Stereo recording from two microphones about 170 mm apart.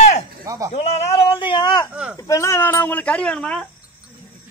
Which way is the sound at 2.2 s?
20° left (ahead or behind).